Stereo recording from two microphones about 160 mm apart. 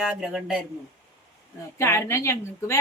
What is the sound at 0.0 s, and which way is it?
Speech, 5° right (ahead or behind).